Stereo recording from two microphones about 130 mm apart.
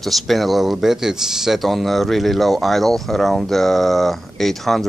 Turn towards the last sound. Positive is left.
turn(degrees=0)  # may be behind; listen again after turning